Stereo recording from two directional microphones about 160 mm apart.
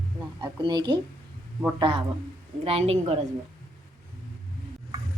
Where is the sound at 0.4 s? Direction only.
30° right (ahead or behind).